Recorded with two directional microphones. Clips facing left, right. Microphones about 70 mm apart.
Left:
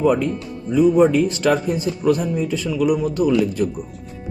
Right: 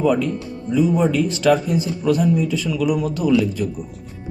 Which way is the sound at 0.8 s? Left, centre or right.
Left.